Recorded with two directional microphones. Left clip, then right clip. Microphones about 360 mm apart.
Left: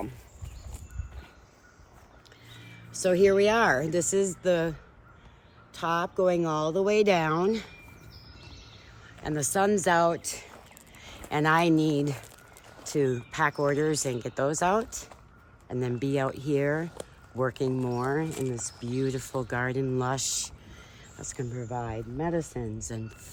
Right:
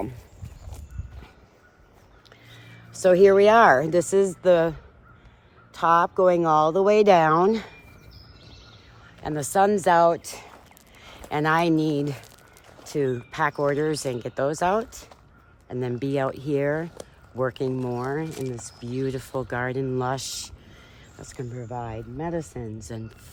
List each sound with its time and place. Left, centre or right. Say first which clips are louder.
2.9 s speech: right 6 dB; centre
9.2 s speech: right 5 dB; centre